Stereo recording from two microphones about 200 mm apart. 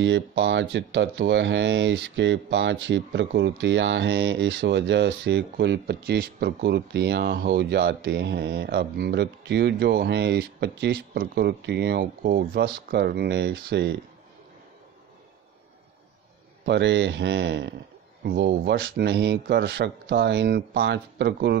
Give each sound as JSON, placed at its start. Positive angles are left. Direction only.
{"t": 0.0, "sound": "speech", "side_deg": -65}
{"t": 16.6, "sound": "speech", "side_deg": -60}